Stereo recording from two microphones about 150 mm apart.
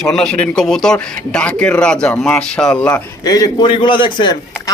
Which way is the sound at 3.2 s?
25° left (ahead or behind).